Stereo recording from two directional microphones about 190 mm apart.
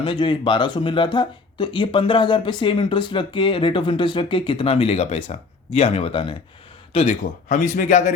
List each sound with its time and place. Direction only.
0.0 s speech: 25° left (ahead or behind); by 8.1 s 45° left (ahead or behind)